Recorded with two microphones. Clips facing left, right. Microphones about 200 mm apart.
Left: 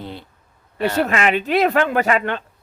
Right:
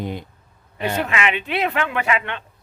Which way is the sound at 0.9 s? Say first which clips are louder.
Left 4 dB; 40° left (ahead or behind).